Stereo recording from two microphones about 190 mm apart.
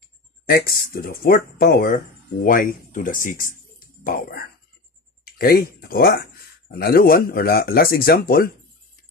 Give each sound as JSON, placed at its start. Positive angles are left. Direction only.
{"t": 0.5, "sound": "speech", "side_deg": 55}